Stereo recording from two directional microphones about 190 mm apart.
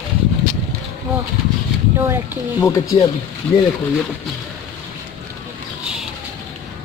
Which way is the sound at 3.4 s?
5° left (ahead or behind).